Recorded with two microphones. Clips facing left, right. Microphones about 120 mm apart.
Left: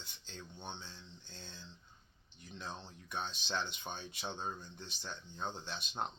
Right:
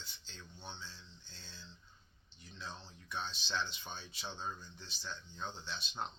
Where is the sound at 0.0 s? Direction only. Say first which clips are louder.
Left 3 dB; 50° left (ahead or behind).